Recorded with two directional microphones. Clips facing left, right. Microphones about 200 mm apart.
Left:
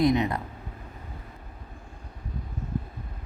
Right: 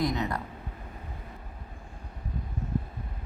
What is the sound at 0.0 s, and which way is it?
Speech, 20° left (ahead or behind).